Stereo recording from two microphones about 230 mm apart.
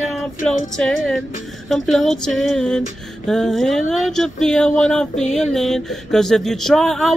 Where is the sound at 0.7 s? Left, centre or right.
Centre.